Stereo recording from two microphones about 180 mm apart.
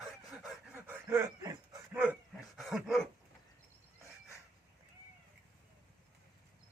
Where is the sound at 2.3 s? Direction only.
Centre (ahead or behind).